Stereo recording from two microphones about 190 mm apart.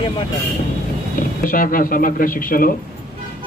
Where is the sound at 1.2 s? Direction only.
45° left (ahead or behind).